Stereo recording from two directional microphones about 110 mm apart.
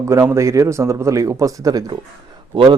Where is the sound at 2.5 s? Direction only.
45° right (ahead or behind).